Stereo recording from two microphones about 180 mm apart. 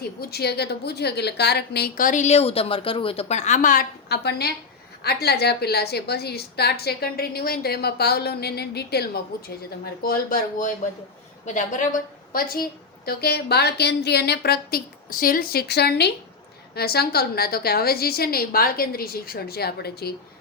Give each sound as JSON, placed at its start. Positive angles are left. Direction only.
{"t": 0.2, "sound": "a woman's voice", "side_deg": 60}
{"t": 11.4, "sound": "a woman's voice", "side_deg": 45}
{"t": 12.3, "sound": "a woman's voice", "side_deg": 55}